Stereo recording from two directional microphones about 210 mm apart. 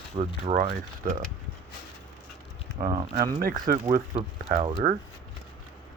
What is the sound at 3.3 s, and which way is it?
Speech, 45° right (ahead or behind).